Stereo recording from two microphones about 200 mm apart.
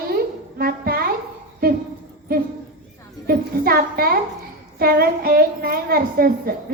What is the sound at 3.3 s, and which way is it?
A woman's voice, 50° right (ahead or behind).